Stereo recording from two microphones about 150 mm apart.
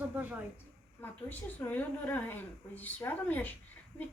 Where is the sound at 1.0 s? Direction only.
10° left (ahead or behind).